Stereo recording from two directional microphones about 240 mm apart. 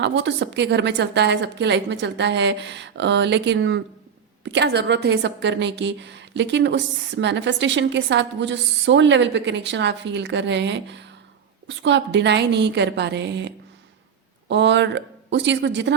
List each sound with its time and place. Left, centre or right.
0.0 s a woman's voice: right